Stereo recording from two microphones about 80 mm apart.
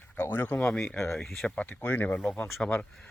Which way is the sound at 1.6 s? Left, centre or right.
Left.